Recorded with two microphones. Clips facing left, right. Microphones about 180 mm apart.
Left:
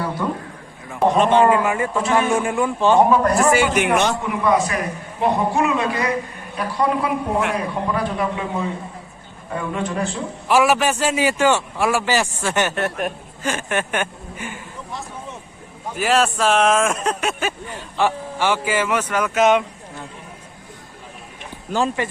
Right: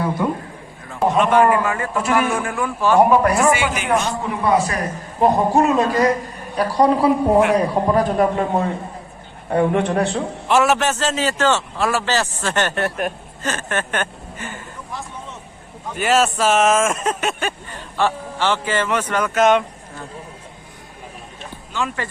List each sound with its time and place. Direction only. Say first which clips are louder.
0.2 s a man's voice: right 2 dB; 10° right (ahead or behind)
1.1 s a man's voice: even; 30° left (ahead or behind)
3.3 s speech: left 1 dB; 40° left (ahead or behind)
3.8 s a man's voice: left 2 dB; 80° left
4.2 s a man's voice: even; 30° right (ahead or behind); by 10.2 s 55° right (ahead or behind)
10.5 s a man's voice: even; 5° left (ahead or behind)
13.4 s speech: left 1 dB; 15° left (ahead or behind)
16.0 s speech: right 1 dB; centre (ahead or behind)
17.9 s a man's voice: even; 15° left (ahead or behind)
21.7 s speech: left 5 dB; 35° left (ahead or behind)